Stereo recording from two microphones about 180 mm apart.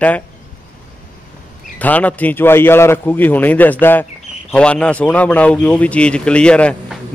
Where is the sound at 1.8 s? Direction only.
10° left (ahead or behind).